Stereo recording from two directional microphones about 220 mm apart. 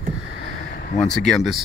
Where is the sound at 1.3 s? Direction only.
Centre (ahead or behind).